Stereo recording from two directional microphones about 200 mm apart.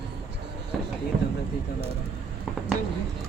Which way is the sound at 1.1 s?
55° right (ahead or behind).